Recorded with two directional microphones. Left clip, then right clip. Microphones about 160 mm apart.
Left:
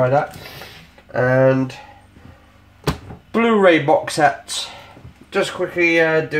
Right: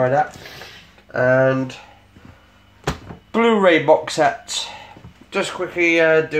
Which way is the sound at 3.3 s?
10° right (ahead or behind).